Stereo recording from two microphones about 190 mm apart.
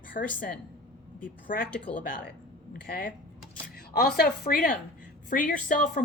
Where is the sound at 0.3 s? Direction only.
45° left (ahead or behind).